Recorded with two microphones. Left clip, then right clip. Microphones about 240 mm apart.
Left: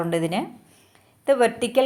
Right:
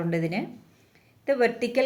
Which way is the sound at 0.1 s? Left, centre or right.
Centre.